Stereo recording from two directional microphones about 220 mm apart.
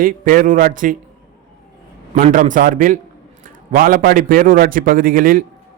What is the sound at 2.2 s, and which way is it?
A man's voice, 35° right (ahead or behind).